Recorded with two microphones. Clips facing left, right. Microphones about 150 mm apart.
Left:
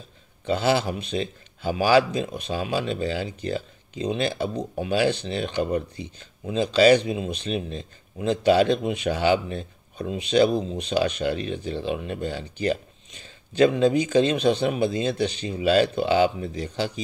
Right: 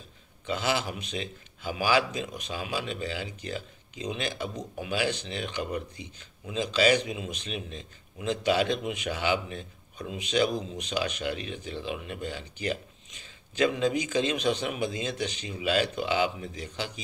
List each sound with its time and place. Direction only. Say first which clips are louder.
0.5 s a man's voice: left 7 dB; 30° left (ahead or behind)